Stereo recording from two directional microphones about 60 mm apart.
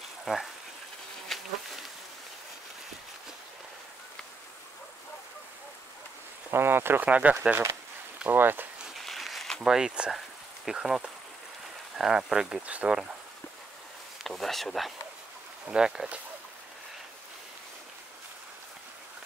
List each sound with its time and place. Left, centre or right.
0.2 s speech: centre
1.3 s insect: centre
6.5 s speech: right
7.1 s speech: right
8.3 s speech: right
8.9 s a sound: centre
9.7 s speech: centre
10.1 s a sound: centre
12.0 s speech: centre
12.6 s speech: right
14.2 s speech: centre
15.6 s speech: centre